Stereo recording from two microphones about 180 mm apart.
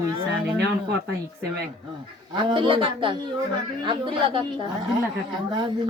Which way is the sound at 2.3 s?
25° right (ahead or behind).